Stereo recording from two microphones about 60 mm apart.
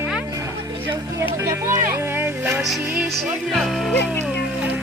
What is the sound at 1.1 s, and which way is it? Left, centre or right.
Speech, right.